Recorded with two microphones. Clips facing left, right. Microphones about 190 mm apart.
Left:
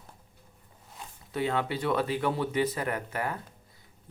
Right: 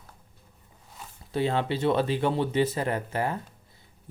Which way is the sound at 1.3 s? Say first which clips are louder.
Right 3 dB; 30° right (ahead or behind).